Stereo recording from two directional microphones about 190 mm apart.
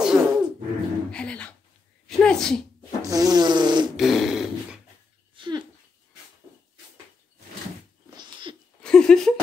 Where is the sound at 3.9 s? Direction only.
Centre (ahead or behind).